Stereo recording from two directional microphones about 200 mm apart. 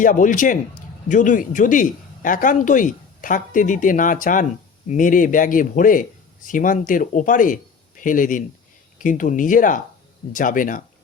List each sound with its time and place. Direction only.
0.0 s a man's voice: 40° left (ahead or behind)